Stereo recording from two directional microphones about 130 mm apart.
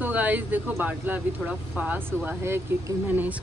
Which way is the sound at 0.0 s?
15° right (ahead or behind).